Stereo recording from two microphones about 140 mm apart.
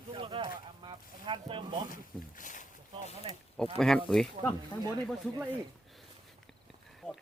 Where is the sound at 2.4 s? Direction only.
65° left (ahead or behind).